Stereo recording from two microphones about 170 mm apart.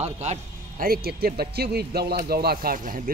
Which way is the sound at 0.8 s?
60° right (ahead or behind).